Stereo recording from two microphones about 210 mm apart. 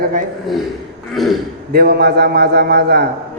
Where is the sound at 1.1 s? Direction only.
Centre (ahead or behind).